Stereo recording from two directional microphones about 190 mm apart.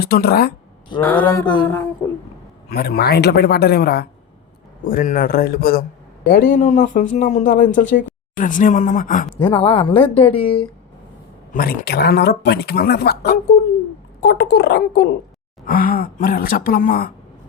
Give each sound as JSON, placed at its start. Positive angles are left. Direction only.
{"t": 0.0, "sound": "speech", "side_deg": 55}
{"t": 1.0, "sound": "a sound", "side_deg": 10}
{"t": 2.6, "sound": "speech", "side_deg": 55}
{"t": 9.4, "sound": "a woman's voice", "side_deg": 30}
{"t": 11.5, "sound": "speech", "side_deg": 50}